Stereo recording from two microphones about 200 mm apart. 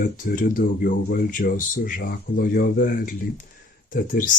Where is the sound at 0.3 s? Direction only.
40° left (ahead or behind).